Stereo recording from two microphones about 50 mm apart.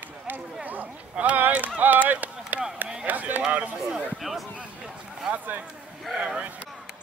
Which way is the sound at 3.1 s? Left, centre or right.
Right.